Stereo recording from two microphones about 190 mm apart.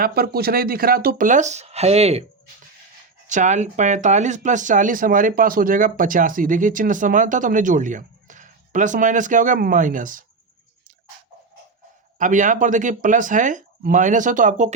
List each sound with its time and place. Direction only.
0.0 s speech: 55° right (ahead or behind); by 2.2 s 35° right (ahead or behind)
3.2 s speech: 40° right (ahead or behind)
12.2 s speech: 40° right (ahead or behind)